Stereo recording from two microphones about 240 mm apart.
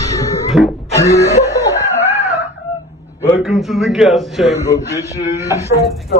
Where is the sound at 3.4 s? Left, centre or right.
Centre.